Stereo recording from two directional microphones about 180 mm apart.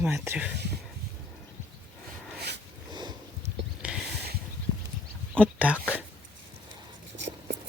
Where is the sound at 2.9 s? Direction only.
25° right (ahead or behind).